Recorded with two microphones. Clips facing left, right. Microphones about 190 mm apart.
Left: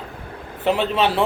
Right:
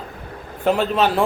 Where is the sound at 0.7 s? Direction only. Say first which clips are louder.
Right 1 dB; centre (ahead or behind).